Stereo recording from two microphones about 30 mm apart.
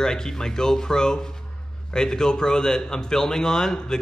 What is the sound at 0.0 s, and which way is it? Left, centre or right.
A man's voice, centre.